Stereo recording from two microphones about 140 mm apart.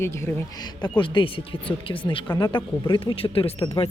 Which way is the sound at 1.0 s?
35° left (ahead or behind).